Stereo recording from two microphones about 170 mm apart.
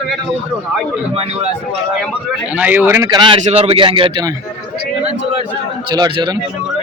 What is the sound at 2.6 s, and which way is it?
A man's voice, 10° right (ahead or behind).